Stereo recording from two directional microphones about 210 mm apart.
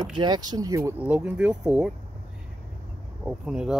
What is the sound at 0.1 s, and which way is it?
Speech, 20° right (ahead or behind).